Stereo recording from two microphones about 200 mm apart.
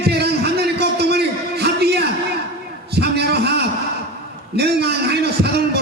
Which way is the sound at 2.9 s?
55° right (ahead or behind).